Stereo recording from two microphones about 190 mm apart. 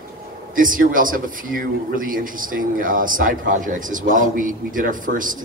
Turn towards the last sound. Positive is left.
turn(degrees=-45)  # may be behind; listen again after turning